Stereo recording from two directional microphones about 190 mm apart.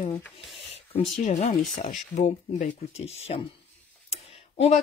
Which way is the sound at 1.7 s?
40° left (ahead or behind).